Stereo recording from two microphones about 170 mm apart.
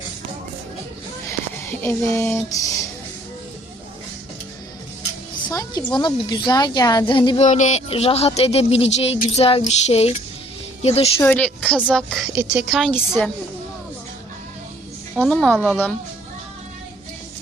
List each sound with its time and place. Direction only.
1.8 s a sound: 15° left (ahead or behind)
5.4 s a woman's voice: 20° left (ahead or behind)
7.4 s speech: 45° left (ahead or behind)
11.2 s a sound: 10° left (ahead or behind)
11.9 s a woman's voice: centre (ahead or behind)
12.3 s speech: 10° right (ahead or behind)
12.6 s a woman's voice: centre (ahead or behind)
12.9 s a sound: 10° left (ahead or behind)
15.2 s a woman's voice: 5° left (ahead or behind)